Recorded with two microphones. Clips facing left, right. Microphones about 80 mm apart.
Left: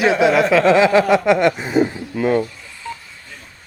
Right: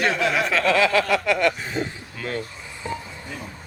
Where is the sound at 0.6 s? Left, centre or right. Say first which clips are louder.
Left 4 dB; left.